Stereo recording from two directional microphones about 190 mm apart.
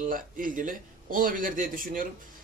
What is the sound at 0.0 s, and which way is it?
Speech, 45° right (ahead or behind).